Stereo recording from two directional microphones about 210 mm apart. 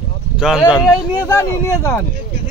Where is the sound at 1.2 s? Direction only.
15° left (ahead or behind).